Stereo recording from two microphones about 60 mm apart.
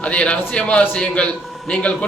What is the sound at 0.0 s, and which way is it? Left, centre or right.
A man's voice, centre.